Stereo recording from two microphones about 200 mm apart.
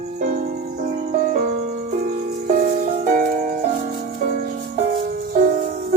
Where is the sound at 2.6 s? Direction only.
40° right (ahead or behind).